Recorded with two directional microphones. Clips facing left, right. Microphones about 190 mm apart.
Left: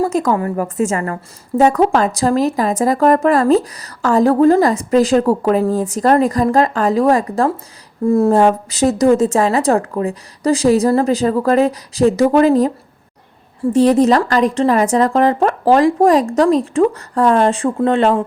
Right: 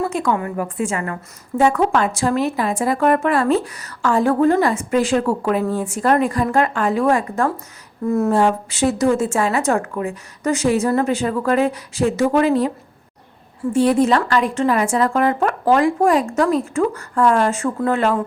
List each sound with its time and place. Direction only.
0.0 s a woman's voice: 40° left (ahead or behind)
13.7 s a woman's voice: 40° left (ahead or behind)